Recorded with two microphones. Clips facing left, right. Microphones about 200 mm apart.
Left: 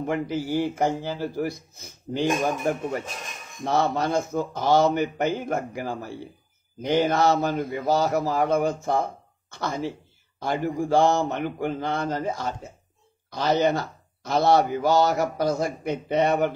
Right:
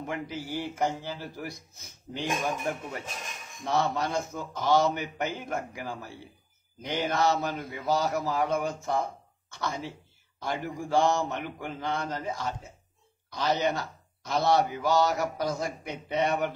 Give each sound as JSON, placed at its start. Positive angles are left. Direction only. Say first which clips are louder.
{"t": 0.0, "sound": "a man's voice", "louder": "left 8 dB", "side_deg": 45}
{"t": 2.1, "sound": "a man's voice", "louder": "left 7 dB", "side_deg": 40}
{"t": 10.4, "sound": "a man's voice", "louder": "left 7 dB", "side_deg": 50}